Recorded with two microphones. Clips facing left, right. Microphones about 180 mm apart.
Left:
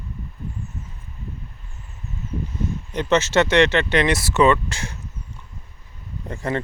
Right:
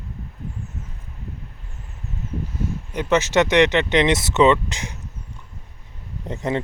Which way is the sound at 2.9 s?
10° right (ahead or behind).